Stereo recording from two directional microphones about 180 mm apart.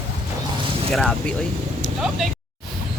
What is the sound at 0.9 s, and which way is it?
Speech, 5° left (ahead or behind).